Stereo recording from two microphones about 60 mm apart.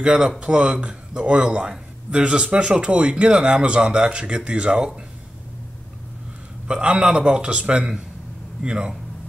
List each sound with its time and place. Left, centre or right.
0.0 s a man's voice: centre
6.7 s a man's voice: right